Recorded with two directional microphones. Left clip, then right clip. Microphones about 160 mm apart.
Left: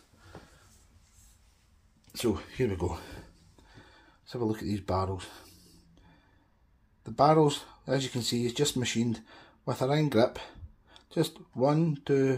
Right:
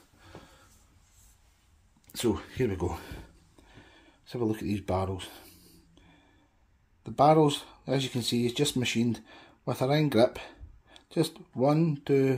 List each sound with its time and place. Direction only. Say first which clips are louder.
2.1 s speech: right 1 dB; 15° right (ahead or behind)
7.0 s speech: right 1 dB; 10° right (ahead or behind)